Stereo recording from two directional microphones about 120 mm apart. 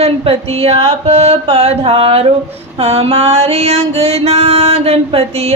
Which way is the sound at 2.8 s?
60° right (ahead or behind).